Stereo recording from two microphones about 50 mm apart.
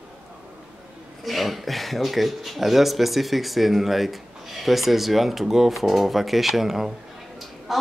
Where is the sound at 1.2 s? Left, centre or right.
Centre.